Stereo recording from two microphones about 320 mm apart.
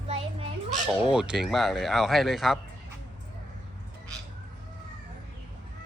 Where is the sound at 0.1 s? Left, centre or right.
Centre.